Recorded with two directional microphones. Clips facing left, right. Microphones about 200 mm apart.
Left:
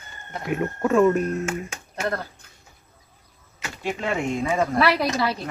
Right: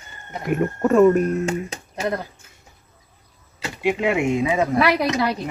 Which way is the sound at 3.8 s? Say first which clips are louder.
Right 6 dB; 10° right (ahead or behind).